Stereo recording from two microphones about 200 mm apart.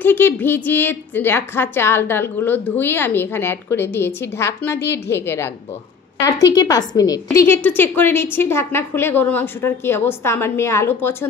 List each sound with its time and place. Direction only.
0.0 s a woman's voice: 10° left (ahead or behind)